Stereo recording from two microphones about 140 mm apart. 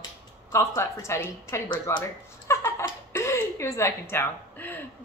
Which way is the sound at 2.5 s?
20° left (ahead or behind).